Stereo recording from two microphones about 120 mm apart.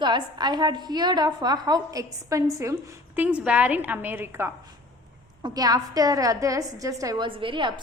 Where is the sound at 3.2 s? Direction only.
10° right (ahead or behind).